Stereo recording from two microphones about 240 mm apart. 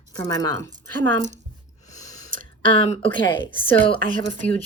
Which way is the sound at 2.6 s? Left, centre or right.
Left.